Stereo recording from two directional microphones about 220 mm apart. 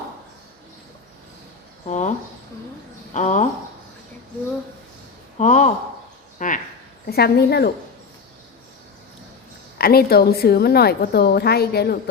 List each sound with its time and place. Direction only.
1.9 s speech: 35° left (ahead or behind)
5.4 s speech: 35° left (ahead or behind)
7.1 s a woman's voice: 45° left (ahead or behind)
9.7 s a woman's voice: 45° left (ahead or behind)